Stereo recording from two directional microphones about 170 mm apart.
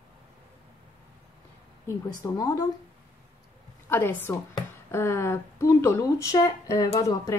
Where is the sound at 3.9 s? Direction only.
15° left (ahead or behind).